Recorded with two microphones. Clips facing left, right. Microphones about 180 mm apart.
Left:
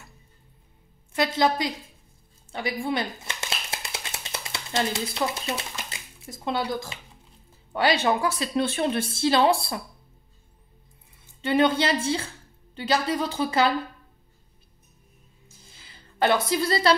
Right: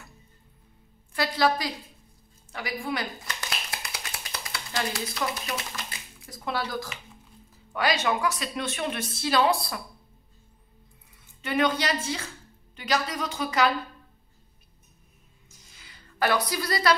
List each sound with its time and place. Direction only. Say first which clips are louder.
1.1 s a woman's voice: left 2 dB; 20° left (ahead or behind)
2.5 s a sound: left 4 dB; 25° left (ahead or behind)
7.7 s a woman's voice: left 3 dB; 30° left (ahead or behind)
11.4 s a woman's voice: left 4 dB; 30° left (ahead or behind)
15.4 s music: left 2 dB; 30° left (ahead or behind)